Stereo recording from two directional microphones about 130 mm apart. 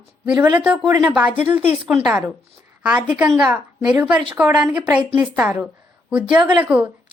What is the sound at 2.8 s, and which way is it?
Speech, 10° right (ahead or behind).